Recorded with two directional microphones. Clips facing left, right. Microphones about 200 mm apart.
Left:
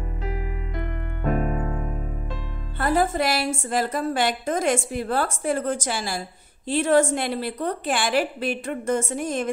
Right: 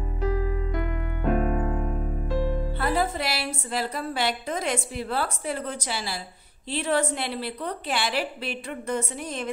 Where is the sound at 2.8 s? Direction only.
45° left (ahead or behind).